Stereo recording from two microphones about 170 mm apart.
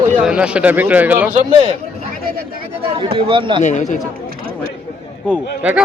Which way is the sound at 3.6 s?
45° left (ahead or behind).